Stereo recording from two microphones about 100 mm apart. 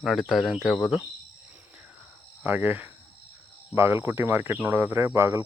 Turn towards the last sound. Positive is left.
turn(degrees=-25)  # may be behind; listen again after turning